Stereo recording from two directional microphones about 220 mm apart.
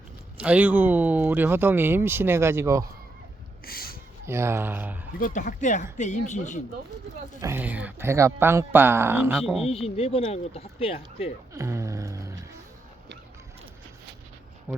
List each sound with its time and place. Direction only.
0.3 s speech: 5° right (ahead or behind)
3.7 s a sound: 45° left (ahead or behind)
4.3 s speech: 10° right (ahead or behind)
5.2 s speech: 35° left (ahead or behind)
7.4 s speech: 10° right (ahead or behind)
9.6 s speech: 25° left (ahead or behind)
11.5 s a sound: 15° right (ahead or behind)